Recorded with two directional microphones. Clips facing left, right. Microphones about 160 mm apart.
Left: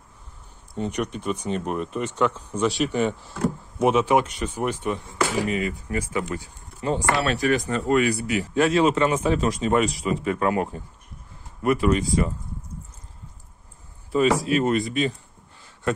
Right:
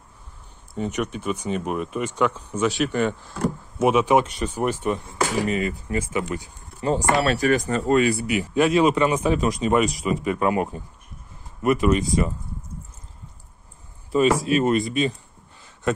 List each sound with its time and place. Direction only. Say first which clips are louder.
0.7 s speech: right 1 dB; 5° right (ahead or behind)
3.8 s speech: right 1 dB; 15° right (ahead or behind); by 5.8 s 40° right (ahead or behind)
5.9 s speech: right 1 dB; 25° right (ahead or behind)
6.8 s speech: right 3 dB; 40° right (ahead or behind); by 12.3 s 20° right (ahead or behind)
14.1 s speech: right 1 dB; 20° right (ahead or behind)